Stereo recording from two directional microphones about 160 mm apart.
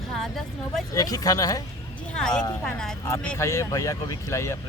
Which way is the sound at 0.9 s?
25° left (ahead or behind).